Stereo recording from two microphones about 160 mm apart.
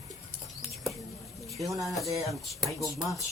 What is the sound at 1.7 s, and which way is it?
Speech, centre (ahead or behind).